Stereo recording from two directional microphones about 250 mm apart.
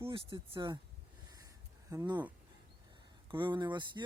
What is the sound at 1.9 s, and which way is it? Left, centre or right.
Speech, centre.